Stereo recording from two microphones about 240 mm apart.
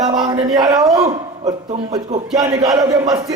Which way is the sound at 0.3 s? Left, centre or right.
Centre.